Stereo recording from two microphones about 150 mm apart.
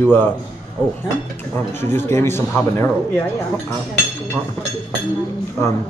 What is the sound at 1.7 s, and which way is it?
A man's voice, 15° left (ahead or behind).